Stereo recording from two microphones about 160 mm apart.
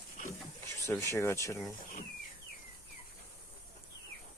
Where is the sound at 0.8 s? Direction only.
15° left (ahead or behind).